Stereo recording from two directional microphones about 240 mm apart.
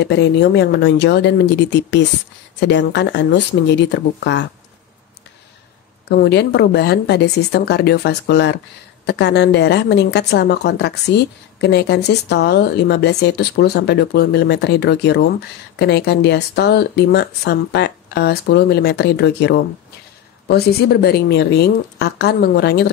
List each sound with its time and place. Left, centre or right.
0.0 s speech: left
6.0 s speech: left